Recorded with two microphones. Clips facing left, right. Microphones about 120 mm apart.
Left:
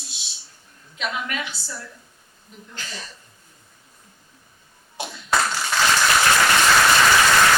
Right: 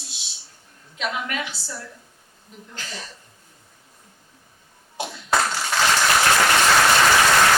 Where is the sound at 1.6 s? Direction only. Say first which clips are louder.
Right 1 dB; 35° right (ahead or behind).